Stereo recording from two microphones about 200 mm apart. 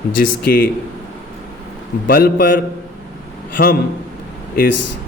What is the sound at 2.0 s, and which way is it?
Speech, 45° left (ahead or behind).